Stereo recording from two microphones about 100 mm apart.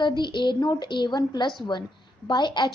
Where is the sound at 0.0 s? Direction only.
50° left (ahead or behind).